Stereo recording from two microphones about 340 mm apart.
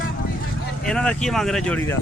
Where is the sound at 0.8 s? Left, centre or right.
Centre.